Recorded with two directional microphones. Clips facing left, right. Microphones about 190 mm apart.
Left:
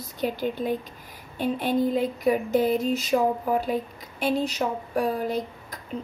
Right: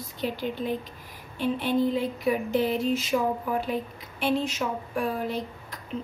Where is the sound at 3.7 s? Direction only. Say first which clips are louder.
Left 2 dB; 40° left (ahead or behind).